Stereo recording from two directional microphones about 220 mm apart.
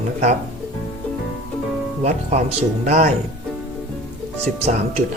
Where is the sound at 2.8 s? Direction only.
35° right (ahead or behind).